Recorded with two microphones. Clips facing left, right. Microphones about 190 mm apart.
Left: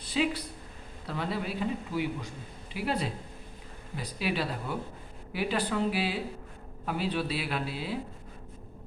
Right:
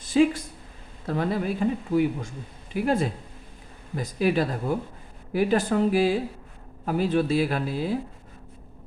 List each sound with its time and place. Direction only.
0.0 s speech: 45° right (ahead or behind)